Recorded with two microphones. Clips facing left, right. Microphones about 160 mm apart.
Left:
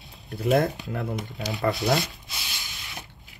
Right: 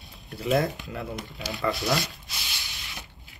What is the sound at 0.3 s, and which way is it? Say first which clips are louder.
Speech: left 3 dB; 55° left (ahead or behind).